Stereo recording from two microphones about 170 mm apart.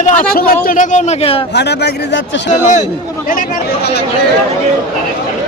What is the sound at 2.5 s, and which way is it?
Speech, 45° left (ahead or behind).